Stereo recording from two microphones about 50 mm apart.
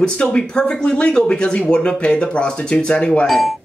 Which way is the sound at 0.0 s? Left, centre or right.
Centre.